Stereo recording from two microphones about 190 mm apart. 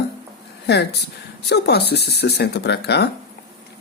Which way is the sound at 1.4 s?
60° left (ahead or behind).